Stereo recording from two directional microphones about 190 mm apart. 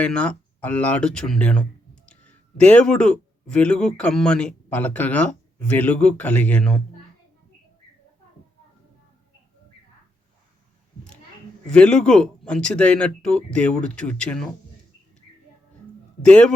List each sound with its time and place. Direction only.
0.0 s speech: 5° left (ahead or behind)
11.6 s speech: 5° left (ahead or behind)
16.2 s speech: 5° left (ahead or behind)